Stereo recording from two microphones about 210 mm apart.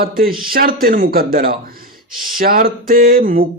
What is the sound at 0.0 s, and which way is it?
Speech, 45° right (ahead or behind).